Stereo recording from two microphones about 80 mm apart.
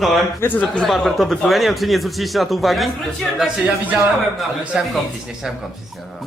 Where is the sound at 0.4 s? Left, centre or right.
Left.